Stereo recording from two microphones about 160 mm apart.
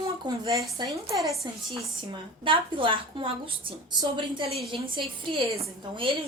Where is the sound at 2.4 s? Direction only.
30° right (ahead or behind).